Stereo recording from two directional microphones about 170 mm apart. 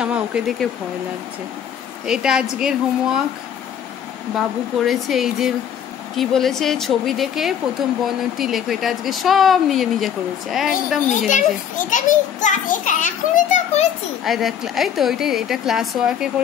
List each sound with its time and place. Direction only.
0.0 s speech: 5° right (ahead or behind)
2.0 s speech: 5° right (ahead or behind)
4.4 s speech: centre (ahead or behind)
11.1 s a child's voice: 50° left (ahead or behind)
14.2 s speech: centre (ahead or behind)